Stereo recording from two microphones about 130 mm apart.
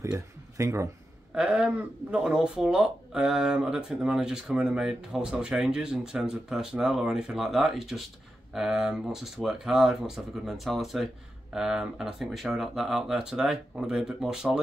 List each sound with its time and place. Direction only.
0.0 s speech: 25° right (ahead or behind)
1.3 s speech: 10° right (ahead or behind)